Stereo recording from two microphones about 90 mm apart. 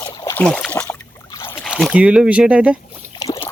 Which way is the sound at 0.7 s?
20° left (ahead or behind).